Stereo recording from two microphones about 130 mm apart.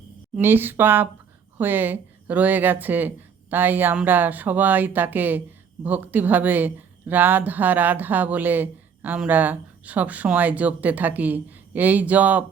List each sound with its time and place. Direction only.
0.3 s a woman's voice: 15° right (ahead or behind)